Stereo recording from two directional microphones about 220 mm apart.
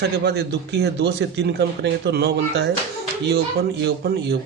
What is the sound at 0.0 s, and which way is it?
A man's voice, 50° right (ahead or behind).